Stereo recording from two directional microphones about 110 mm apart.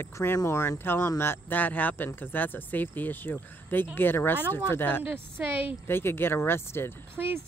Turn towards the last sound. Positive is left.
turn(degrees=-15)  # may be behind; listen again after turning